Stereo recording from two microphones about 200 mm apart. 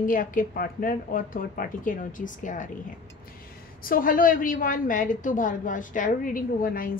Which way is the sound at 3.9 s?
45° left (ahead or behind).